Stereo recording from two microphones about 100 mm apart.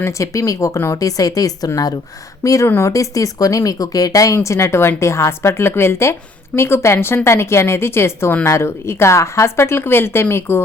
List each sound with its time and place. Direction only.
0.0 s a woman's voice: 30° left (ahead or behind)